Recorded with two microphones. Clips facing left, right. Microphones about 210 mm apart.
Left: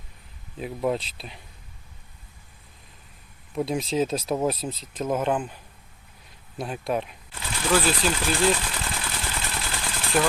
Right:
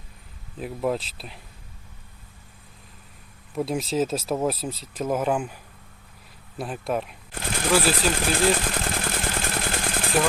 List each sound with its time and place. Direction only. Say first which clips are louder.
0.5 s speech: even; centre (ahead or behind)
3.5 s speech: even; centre (ahead or behind)
6.6 s speech: even; centre (ahead or behind)
7.3 s speech: right 1 dB; 50° right (ahead or behind)
8.5 s a sound: right 5 dB; 50° right (ahead or behind)